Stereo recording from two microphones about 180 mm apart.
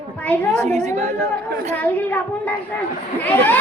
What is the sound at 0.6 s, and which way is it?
Speech, 40° right (ahead or behind).